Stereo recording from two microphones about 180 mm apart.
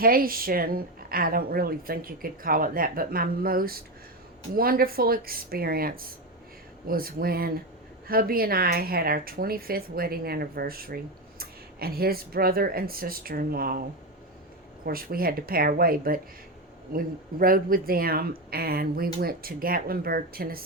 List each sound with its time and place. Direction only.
0.0 s a woman's voice: 55° right (ahead or behind)
14.8 s a woman's voice: 55° right (ahead or behind)
17.4 s a woman's voice: 50° right (ahead or behind)